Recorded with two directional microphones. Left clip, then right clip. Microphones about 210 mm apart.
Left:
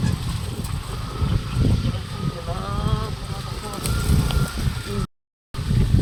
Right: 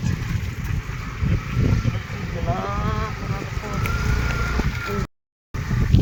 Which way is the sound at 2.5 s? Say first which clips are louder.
Right 5 dB; 20° right (ahead or behind).